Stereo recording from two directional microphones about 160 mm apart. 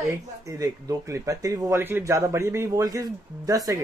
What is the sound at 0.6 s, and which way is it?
Speech, 20° right (ahead or behind).